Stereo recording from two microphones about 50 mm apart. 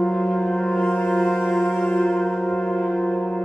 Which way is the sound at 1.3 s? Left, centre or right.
Centre.